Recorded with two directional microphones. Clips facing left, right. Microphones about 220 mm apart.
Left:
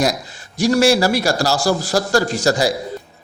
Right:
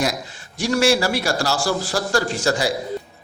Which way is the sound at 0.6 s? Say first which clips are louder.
Left 4 dB; 40° left (ahead or behind).